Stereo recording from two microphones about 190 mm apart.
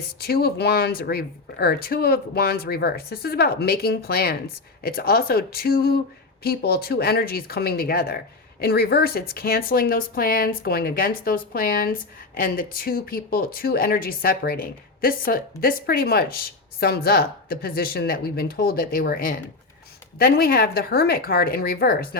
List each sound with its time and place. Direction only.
0.2 s speech: 55° left (ahead or behind)